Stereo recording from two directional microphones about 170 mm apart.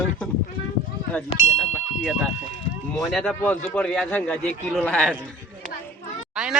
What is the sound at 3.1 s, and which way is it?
A man's voice, centre (ahead or behind).